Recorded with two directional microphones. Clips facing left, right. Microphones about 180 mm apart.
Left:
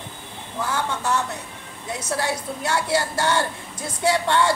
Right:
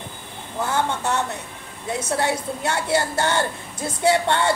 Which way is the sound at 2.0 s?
25° right (ahead or behind).